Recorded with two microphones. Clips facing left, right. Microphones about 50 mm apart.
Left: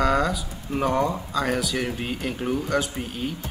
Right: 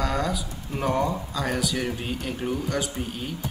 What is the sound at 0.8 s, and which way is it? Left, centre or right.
Speech, centre.